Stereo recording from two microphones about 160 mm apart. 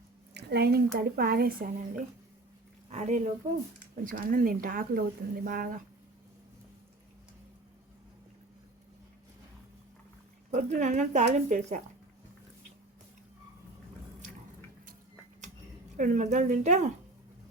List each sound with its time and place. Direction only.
0.3 s a woman's voice: 85° right; by 1.7 s 70° right (ahead or behind)
2.9 s speech: 50° right (ahead or behind)
4.0 s speech: 60° right (ahead or behind)
10.5 s speech: 50° right (ahead or behind)
16.0 s speech: 50° right (ahead or behind)